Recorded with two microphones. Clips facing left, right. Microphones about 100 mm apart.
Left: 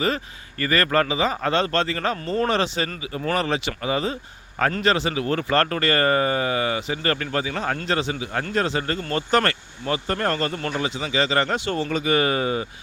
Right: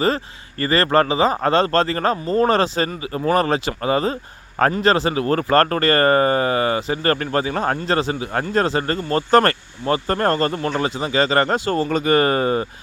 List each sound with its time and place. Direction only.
0.6 s speech: 30° right (ahead or behind)